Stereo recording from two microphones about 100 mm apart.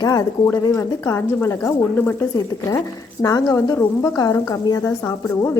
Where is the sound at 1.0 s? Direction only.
25° left (ahead or behind).